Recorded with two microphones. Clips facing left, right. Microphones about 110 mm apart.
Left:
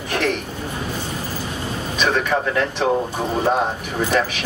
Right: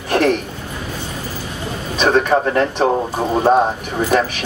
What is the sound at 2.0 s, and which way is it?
Speech, 40° right (ahead or behind).